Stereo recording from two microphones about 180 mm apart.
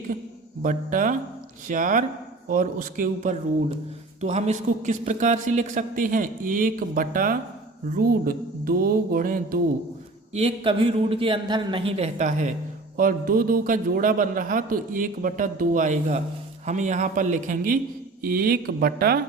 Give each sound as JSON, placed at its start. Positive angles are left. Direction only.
{"t": 0.6, "sound": "a man's voice", "side_deg": -45}
{"t": 4.2, "sound": "a man's voice", "side_deg": -40}
{"t": 10.3, "sound": "a man's voice", "side_deg": -30}